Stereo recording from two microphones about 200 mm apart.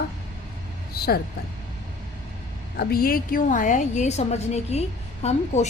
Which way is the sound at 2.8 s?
50° left (ahead or behind).